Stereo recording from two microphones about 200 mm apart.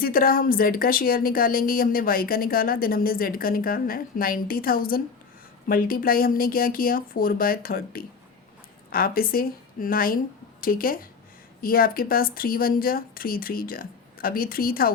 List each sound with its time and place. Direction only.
0.0 s a woman's voice: 45° left (ahead or behind)